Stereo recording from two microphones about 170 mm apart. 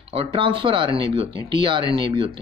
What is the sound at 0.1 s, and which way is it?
Speech, 30° right (ahead or behind).